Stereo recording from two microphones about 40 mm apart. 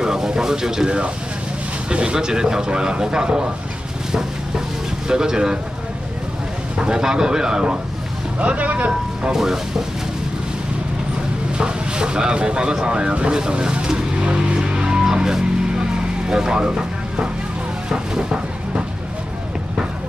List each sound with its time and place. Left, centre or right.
0.0 s a sound: centre
0.8 s speech: right
4.1 s a sound: centre
6.8 s speech: centre
8.4 s speech: right
9.3 s speech: centre
11.5 s speech: right
15.0 s music: centre
16.3 s speech: centre
17.8 s a sound: right